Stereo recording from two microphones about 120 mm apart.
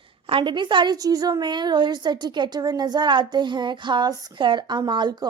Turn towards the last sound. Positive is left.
turn(degrees=-35)  # may be behind; listen again after turning